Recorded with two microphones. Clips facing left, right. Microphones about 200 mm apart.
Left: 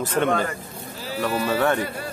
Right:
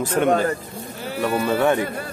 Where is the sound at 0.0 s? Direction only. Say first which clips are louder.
Right 2 dB; 10° right (ahead or behind).